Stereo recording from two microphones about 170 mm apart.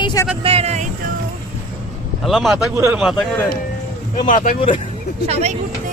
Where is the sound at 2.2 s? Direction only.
Centre (ahead or behind).